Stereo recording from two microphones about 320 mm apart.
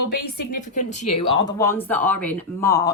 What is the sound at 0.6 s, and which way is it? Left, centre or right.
Speech, left.